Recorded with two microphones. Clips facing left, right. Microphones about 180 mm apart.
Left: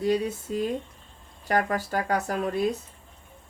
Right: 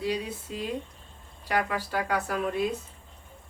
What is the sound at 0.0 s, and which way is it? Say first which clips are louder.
Speech: left 6 dB; 45° left (ahead or behind).